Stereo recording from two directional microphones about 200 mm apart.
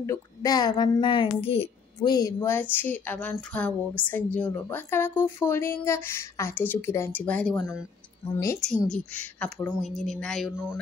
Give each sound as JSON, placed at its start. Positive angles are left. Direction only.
{"t": 0.0, "sound": "a woman's voice", "side_deg": 15}
{"t": 8.6, "sound": "a woman's voice", "side_deg": 5}